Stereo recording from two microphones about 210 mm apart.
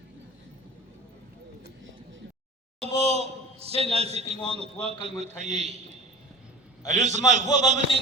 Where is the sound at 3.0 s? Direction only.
30° right (ahead or behind).